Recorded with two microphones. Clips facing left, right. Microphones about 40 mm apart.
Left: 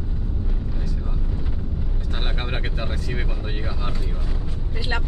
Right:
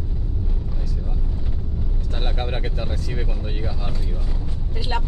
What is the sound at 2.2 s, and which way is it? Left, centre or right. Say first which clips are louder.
Speech: right 2 dB; left.